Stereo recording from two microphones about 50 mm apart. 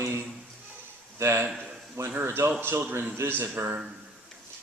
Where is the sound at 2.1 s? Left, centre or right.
Right.